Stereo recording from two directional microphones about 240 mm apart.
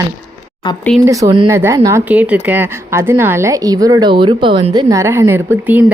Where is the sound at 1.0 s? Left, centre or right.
Centre.